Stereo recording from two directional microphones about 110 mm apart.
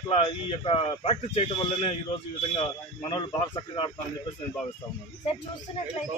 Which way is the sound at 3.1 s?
45° left (ahead or behind).